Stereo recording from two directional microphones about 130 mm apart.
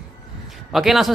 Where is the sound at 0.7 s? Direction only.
Centre (ahead or behind).